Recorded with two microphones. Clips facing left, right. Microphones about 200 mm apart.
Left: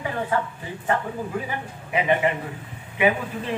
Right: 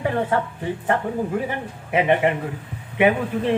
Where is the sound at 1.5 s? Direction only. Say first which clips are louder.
Right 4 dB; 60° right (ahead or behind).